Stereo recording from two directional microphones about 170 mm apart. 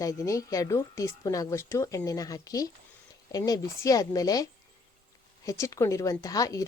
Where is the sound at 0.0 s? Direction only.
20° left (ahead or behind).